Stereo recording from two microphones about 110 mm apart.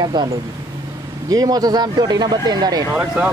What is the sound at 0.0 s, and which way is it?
Speech, 40° right (ahead or behind).